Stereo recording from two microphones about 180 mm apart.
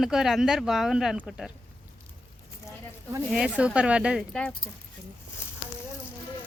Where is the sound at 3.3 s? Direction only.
5° right (ahead or behind).